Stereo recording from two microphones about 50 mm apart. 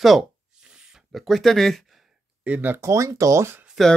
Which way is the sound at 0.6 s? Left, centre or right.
Centre.